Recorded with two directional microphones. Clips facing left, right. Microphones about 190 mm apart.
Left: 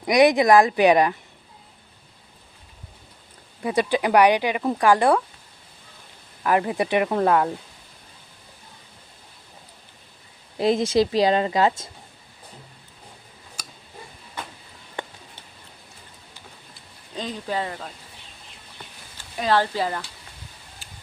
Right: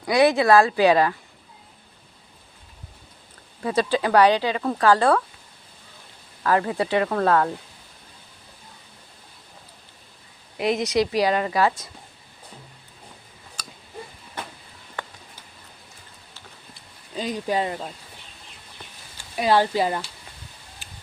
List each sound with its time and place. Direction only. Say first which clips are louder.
0.0 s speech: left 2 dB; 15° left (ahead or behind)
3.6 s speech: even; 15° left (ahead or behind)
6.4 s speech: even; 20° left (ahead or behind)
10.6 s a woman's voice: left 2 dB; 30° left (ahead or behind)
15.0 s a sound: left 2 dB; 25° left (ahead or behind)
17.2 s speech: right 3 dB; 15° right (ahead or behind)
19.1 s speech: right 2 dB; 15° right (ahead or behind)
20.8 s tick-tock: right 1 dB; 20° right (ahead or behind)